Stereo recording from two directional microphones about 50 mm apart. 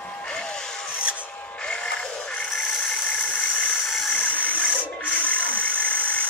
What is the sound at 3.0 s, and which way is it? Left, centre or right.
Engine, left.